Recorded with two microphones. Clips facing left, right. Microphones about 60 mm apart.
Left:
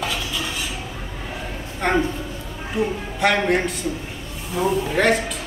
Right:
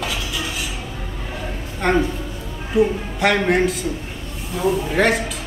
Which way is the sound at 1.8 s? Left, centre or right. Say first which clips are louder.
Right 2 dB; centre.